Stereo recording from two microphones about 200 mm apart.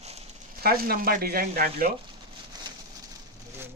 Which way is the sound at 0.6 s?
50° right (ahead or behind).